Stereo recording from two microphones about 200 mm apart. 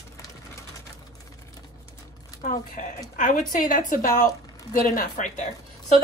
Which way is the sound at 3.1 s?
40° left (ahead or behind).